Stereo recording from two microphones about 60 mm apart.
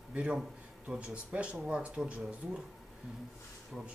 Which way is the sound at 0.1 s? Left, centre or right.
Right.